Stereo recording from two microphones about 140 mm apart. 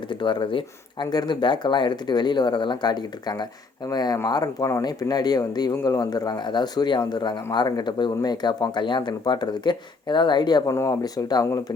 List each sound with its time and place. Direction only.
0.1 s speech: 35° left (ahead or behind)